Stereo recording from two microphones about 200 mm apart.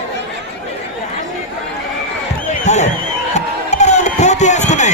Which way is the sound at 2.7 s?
35° left (ahead or behind).